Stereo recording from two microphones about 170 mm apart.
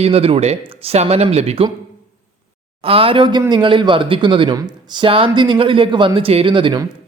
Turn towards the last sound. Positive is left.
turn(degrees=-30)  # may be behind; listen again after turning